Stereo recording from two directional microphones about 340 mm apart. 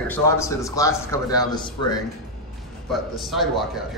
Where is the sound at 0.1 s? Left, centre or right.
Centre.